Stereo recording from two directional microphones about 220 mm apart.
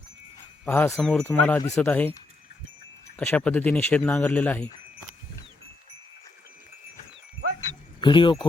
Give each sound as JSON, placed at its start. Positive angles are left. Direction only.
{"t": 0.6, "sound": "speech", "side_deg": 10}
{"t": 3.2, "sound": "speech", "side_deg": 5}
{"t": 8.0, "sound": "speech", "side_deg": 20}